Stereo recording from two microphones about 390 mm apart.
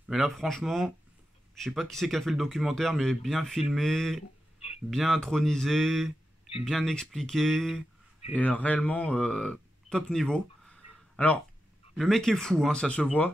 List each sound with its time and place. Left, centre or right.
0.1 s speech: centre
4.6 s a sound: centre
4.9 s speech: centre